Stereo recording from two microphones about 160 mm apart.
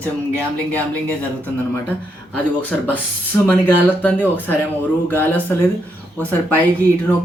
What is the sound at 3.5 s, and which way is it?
Speech, 10° left (ahead or behind).